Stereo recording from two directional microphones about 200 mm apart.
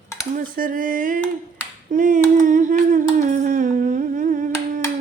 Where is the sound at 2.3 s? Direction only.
40° right (ahead or behind).